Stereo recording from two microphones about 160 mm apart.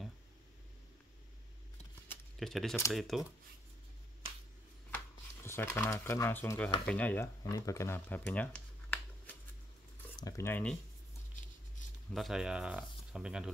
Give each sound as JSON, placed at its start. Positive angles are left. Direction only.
{"t": 2.3, "sound": "speech", "side_deg": 0}
{"t": 4.9, "sound": "speech", "side_deg": 15}
{"t": 12.1, "sound": "speech", "side_deg": 0}